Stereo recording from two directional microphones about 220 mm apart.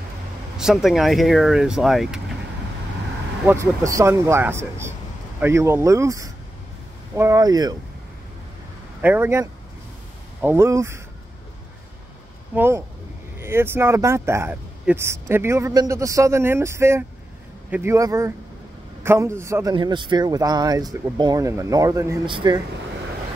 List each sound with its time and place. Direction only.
0.6 s speech: centre (ahead or behind)
3.4 s speech: 15° right (ahead or behind)
9.0 s speech: 10° right (ahead or behind)
12.5 s speech: 10° right (ahead or behind)